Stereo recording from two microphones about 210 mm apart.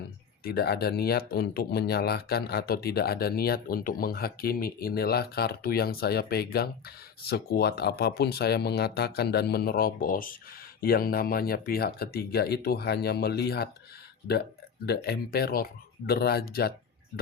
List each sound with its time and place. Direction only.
0.4 s speech: 50° left (ahead or behind)
14.8 s speech: 50° left (ahead or behind)